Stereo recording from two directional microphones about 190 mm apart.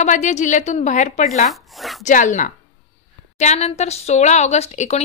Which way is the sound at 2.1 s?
40° left (ahead or behind).